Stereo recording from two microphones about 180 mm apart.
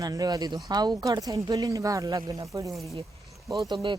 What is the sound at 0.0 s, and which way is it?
Speech, 20° right (ahead or behind).